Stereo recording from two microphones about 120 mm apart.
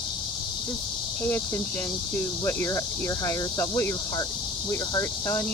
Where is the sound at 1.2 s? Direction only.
20° left (ahead or behind).